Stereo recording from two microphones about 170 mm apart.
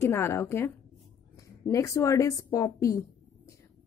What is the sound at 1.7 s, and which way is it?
Speech, 20° left (ahead or behind).